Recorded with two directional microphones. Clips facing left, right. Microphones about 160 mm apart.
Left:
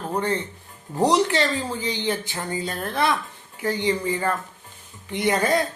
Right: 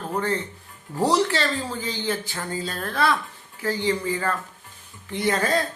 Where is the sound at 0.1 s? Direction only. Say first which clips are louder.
Left 1 dB; 20° left (ahead or behind).